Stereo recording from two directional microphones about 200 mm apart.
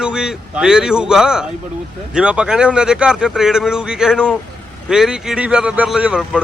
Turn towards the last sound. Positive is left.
turn(degrees=-5)  # may be behind; listen again after turning